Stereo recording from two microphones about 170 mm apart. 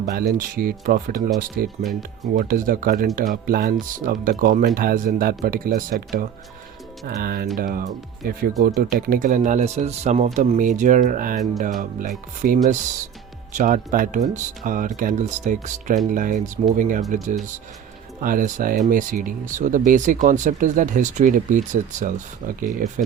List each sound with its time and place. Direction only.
0.0 s speech: 60° right (ahead or behind)
18.2 s speech: 55° right (ahead or behind)